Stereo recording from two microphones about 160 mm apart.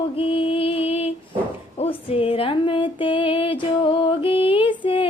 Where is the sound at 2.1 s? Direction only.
35° left (ahead or behind).